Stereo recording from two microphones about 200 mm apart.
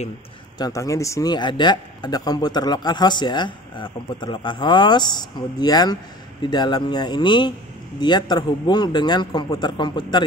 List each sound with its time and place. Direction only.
0.6 s a man's voice: 15° left (ahead or behind)